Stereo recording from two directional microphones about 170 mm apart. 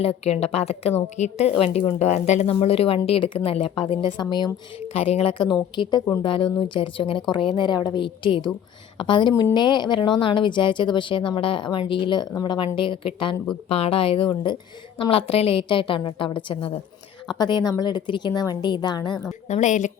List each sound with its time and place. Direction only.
0.3 s a woman's voice: 35° left (ahead or behind)
4.9 s a woman's voice: 35° left (ahead or behind)
19.5 s speech: 45° left (ahead or behind)